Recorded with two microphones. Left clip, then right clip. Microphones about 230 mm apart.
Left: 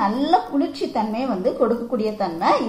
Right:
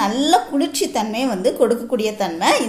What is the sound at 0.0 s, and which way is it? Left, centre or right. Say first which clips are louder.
A woman's voice: right 2 dB; right.